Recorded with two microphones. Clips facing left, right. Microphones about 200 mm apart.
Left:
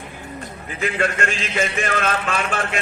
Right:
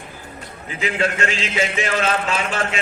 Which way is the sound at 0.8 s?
55° left (ahead or behind).